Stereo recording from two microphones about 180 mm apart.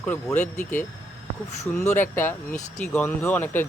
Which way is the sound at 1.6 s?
15° left (ahead or behind).